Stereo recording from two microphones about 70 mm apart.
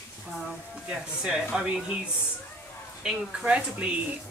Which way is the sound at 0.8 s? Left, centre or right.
Centre.